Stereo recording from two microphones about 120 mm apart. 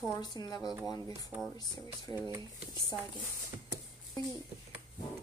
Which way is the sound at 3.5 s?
25° right (ahead or behind).